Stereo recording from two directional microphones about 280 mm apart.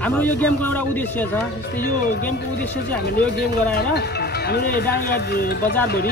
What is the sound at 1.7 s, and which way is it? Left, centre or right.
Speech, left.